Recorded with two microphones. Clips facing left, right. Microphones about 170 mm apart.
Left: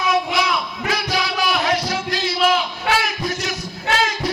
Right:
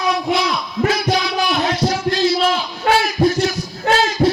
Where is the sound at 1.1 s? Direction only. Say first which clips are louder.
Right 3 dB; 25° right (ahead or behind).